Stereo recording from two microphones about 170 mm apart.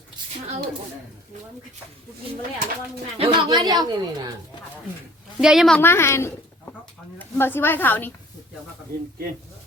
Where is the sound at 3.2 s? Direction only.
35° right (ahead or behind).